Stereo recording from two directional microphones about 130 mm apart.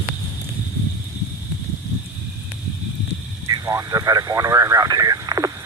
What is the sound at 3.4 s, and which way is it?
Vehicle, 25° right (ahead or behind).